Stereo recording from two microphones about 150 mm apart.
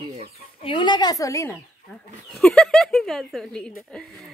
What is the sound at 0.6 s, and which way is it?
Speech, 30° left (ahead or behind).